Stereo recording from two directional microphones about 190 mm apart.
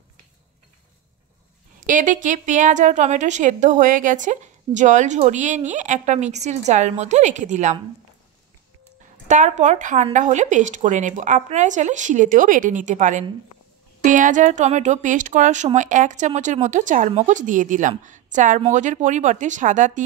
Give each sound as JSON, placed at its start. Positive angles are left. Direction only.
{"t": 1.9, "sound": "speech", "side_deg": -45}
{"t": 9.3, "sound": "speech", "side_deg": -40}